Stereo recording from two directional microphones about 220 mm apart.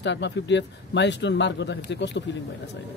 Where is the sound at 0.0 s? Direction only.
55° left (ahead or behind).